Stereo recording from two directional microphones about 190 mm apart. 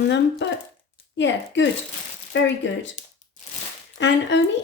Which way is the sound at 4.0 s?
65° left (ahead or behind).